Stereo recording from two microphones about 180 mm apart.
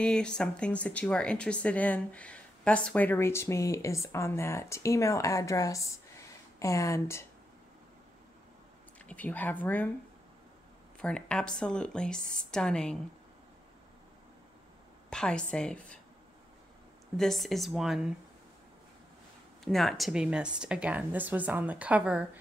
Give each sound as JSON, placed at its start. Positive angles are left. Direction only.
{"t": 0.0, "sound": "speech", "side_deg": 5}
{"t": 9.0, "sound": "speech", "side_deg": 10}
{"t": 11.0, "sound": "speech", "side_deg": 5}
{"t": 15.0, "sound": "a woman's voice", "side_deg": 5}
{"t": 17.2, "sound": "speech", "side_deg": 0}
{"t": 19.6, "sound": "a woman's voice", "side_deg": 0}